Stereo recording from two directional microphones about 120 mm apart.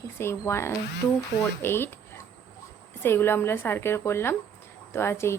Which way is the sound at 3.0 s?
20° left (ahead or behind).